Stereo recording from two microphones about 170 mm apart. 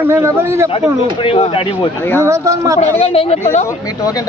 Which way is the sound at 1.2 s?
35° left (ahead or behind).